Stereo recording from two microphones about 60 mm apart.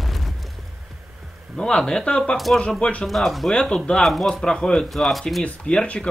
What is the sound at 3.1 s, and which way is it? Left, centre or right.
Speech, centre.